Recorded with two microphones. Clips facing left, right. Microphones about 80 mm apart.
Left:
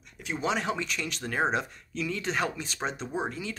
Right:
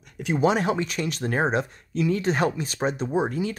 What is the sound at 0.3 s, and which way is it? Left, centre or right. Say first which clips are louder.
Speech: right 8 dB; right.